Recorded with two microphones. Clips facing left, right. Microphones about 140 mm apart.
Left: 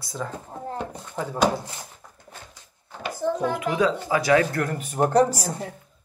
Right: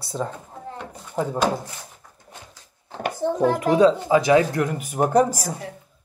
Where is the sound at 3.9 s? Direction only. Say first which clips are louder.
Right 3 dB; 20° right (ahead or behind).